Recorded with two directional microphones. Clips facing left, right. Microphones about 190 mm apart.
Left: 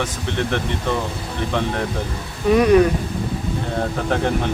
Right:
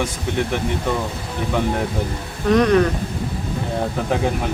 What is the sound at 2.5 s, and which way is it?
Speech, 10° left (ahead or behind).